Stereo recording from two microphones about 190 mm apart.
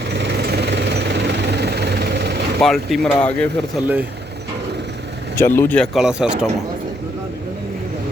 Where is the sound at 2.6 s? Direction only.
Centre (ahead or behind).